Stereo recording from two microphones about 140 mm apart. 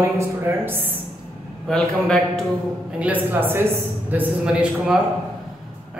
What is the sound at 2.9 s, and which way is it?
A man's voice, 10° right (ahead or behind).